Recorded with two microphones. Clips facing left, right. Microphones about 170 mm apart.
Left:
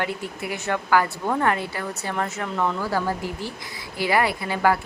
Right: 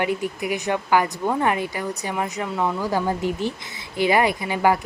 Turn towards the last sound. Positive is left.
turn(degrees=-15)  # may be behind; listen again after turning